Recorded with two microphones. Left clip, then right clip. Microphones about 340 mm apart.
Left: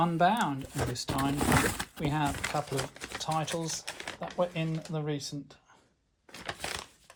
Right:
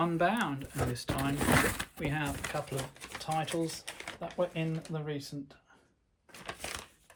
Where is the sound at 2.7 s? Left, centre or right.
Left.